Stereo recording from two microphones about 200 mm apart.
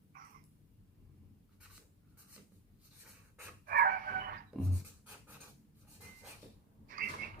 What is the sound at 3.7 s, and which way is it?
Chicken, 45° right (ahead or behind).